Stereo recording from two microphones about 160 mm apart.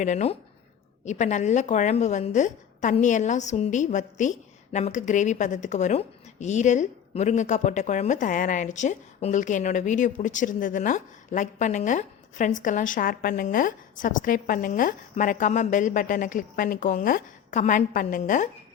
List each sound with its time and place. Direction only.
0.0 s a woman's voice: 45° left (ahead or behind)